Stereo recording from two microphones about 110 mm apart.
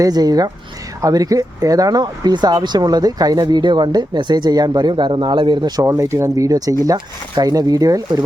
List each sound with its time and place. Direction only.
0.0 s speech: 35° right (ahead or behind)
5.8 s speech: 25° right (ahead or behind)